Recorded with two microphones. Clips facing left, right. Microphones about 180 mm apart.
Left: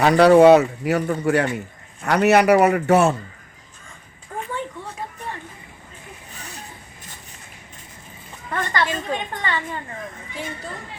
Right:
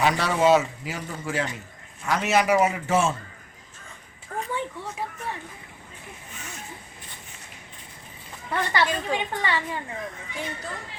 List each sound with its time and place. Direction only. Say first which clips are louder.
0.0 s a man's voice: left 10 dB; 65° left (ahead or behind)
6.3 s a sound: left 2 dB; 35° left (ahead or behind)
8.4 s a woman's voice: left 1 dB; 10° right (ahead or behind)